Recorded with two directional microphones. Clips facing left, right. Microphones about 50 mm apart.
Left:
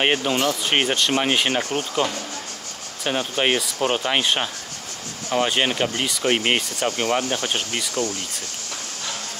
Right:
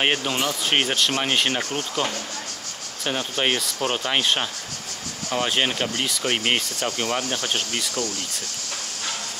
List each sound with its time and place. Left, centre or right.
0.0 s speech: centre
1.6 s speech: left
3.0 s speech: centre